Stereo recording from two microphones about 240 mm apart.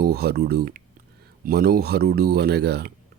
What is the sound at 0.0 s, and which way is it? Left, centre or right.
Speech, right.